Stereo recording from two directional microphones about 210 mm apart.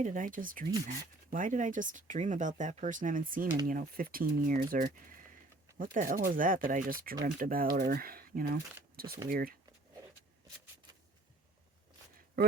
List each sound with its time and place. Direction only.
0.0 s speech: 40° right (ahead or behind)